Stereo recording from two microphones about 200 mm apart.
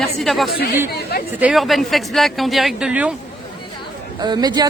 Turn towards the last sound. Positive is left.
turn(degrees=-20)  # may be behind; listen again after turning